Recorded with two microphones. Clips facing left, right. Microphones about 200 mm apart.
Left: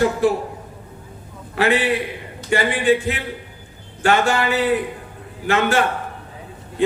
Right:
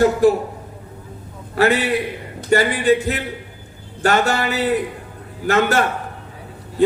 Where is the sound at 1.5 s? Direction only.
40° right (ahead or behind).